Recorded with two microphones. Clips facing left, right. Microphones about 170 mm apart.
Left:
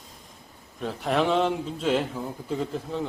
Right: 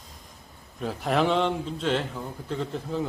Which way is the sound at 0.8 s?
Centre (ahead or behind).